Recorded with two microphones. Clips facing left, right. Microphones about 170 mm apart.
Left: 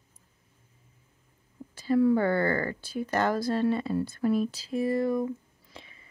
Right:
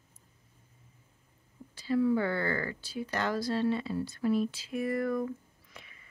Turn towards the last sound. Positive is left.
turn(degrees=30)  # may be behind; listen again after turning